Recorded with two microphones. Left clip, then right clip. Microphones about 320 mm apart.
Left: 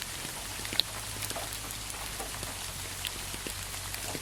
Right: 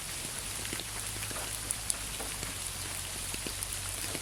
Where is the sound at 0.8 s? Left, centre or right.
Left.